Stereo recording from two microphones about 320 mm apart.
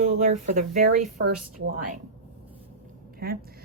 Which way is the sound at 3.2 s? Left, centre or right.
Right.